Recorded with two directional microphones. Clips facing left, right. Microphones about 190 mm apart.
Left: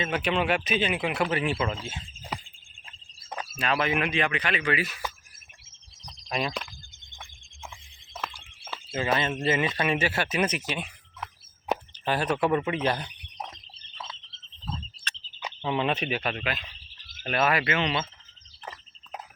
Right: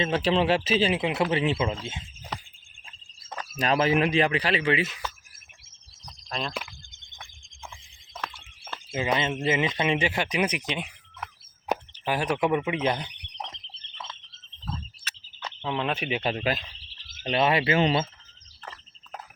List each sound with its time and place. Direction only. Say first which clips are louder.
0.0 s speech: right 3 dB; 30° right (ahead or behind)
3.2 s a sound: left 1 dB; 15° left (ahead or behind)
3.6 s speech: right 4 dB; 35° right (ahead or behind)
6.3 s speech: left 3 dB; 5° left (ahead or behind)
8.9 s speech: even; 15° right (ahead or behind)
12.0 s speech: even; 10° right (ahead or behind)
15.6 s speech: left 2 dB; centre (ahead or behind)
16.0 s speech: right 3 dB; 25° right (ahead or behind)
17.2 s speech: right 2 dB; 25° right (ahead or behind)
18.6 s a sound: left 2 dB; 15° left (ahead or behind)